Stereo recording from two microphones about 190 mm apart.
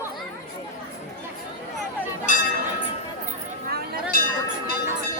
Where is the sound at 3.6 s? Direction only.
55° right (ahead or behind).